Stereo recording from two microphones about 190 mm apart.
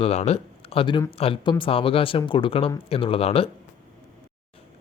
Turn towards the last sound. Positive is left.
turn(degrees=30)  # may be behind; listen again after turning